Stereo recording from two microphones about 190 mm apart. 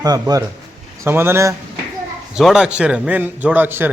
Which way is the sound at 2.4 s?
5° right (ahead or behind).